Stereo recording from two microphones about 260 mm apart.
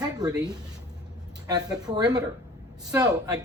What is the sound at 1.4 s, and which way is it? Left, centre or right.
Speech, centre.